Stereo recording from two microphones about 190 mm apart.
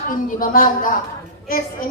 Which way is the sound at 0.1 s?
45° left (ahead or behind).